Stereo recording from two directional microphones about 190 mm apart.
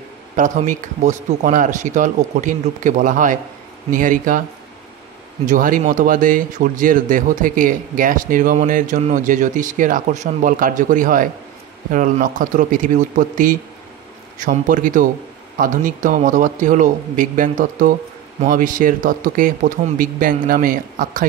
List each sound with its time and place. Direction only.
0.4 s speech: 40° right (ahead or behind)
5.4 s speech: 45° right (ahead or behind)